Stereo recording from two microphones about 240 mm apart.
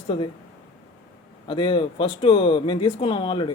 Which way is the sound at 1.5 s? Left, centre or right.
Left.